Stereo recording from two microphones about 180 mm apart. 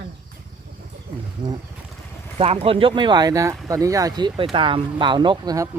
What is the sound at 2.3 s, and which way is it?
Speech, 35° right (ahead or behind).